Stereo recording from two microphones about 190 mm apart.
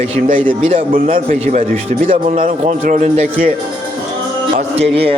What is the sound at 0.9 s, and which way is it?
A man's voice, 45° right (ahead or behind).